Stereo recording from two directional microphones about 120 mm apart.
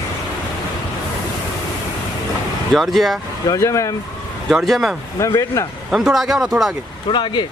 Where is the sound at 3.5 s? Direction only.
25° left (ahead or behind).